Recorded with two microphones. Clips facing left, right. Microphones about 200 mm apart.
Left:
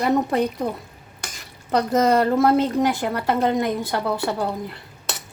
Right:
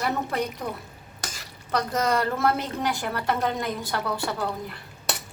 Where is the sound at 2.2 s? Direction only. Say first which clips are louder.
Left 7 dB; 20° left (ahead or behind).